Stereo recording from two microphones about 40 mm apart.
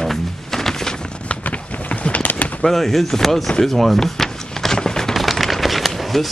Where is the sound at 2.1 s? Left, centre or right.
Left.